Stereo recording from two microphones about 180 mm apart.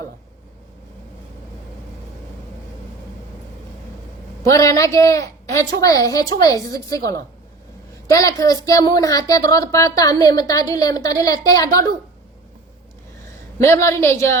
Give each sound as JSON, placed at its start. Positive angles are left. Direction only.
{"t": 4.4, "sound": "speech", "side_deg": 15}
{"t": 13.6, "sound": "a woman's voice", "side_deg": 15}